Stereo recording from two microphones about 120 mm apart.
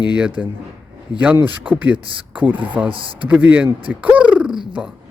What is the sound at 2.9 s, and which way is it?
Speech, 45° right (ahead or behind).